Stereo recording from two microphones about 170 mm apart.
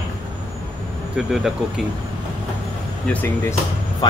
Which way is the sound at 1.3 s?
Centre (ahead or behind).